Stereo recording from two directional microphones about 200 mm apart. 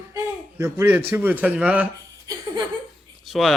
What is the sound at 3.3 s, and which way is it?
Speech, centre (ahead or behind).